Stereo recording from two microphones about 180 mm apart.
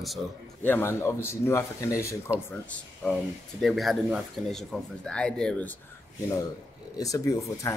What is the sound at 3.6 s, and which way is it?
Speech, centre (ahead or behind).